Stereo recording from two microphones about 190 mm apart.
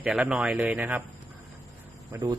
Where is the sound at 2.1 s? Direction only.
15° right (ahead or behind).